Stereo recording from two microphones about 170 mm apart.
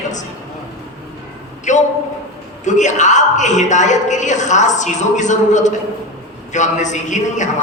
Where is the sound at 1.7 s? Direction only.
45° left (ahead or behind).